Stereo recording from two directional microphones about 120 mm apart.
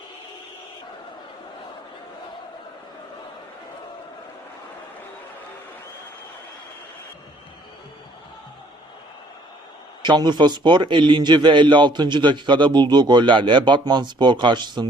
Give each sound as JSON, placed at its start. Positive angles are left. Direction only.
{"t": 10.0, "sound": "a man's voice", "side_deg": -40}